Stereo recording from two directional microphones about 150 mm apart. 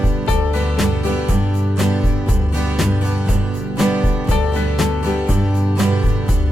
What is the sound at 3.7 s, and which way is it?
Music, 5° right (ahead or behind).